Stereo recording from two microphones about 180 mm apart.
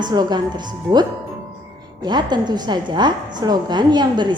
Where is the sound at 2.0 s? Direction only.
25° right (ahead or behind).